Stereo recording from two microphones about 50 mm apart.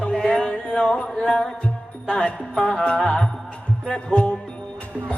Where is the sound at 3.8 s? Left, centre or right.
Left.